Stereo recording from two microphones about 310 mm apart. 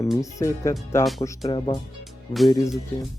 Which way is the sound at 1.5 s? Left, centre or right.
Centre.